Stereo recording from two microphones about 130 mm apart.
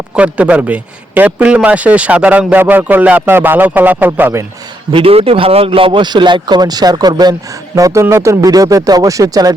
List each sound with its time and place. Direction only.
0.2 s a man's voice: 10° right (ahead or behind)
4.9 s a man's voice: 45° right (ahead or behind); by 9.6 s 30° right (ahead or behind)